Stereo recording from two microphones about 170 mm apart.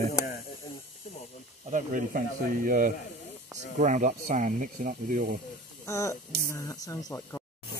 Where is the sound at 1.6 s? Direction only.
50° right (ahead or behind).